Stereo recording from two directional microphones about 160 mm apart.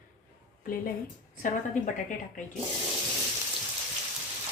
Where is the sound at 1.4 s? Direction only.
55° left (ahead or behind).